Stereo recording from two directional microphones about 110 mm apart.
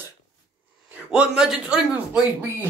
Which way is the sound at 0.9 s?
10° right (ahead or behind).